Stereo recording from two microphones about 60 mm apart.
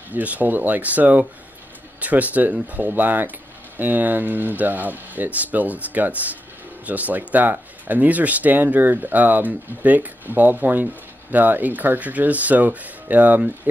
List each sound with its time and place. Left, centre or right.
0.1 s speech: right